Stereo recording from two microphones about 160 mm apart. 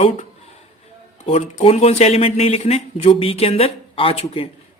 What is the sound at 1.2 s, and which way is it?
Speech, 45° left (ahead or behind).